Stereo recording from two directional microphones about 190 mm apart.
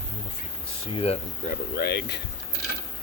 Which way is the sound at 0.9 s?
25° left (ahead or behind).